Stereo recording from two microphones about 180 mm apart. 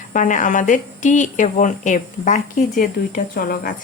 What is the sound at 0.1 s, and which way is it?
Speech, 45° left (ahead or behind).